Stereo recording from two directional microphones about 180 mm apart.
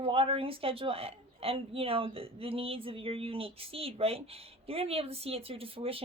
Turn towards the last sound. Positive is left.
turn(degrees=-30)  # may be behind; listen again after turning